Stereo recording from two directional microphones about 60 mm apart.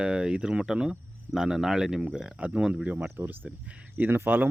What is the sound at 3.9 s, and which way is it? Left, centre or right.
Speech, right.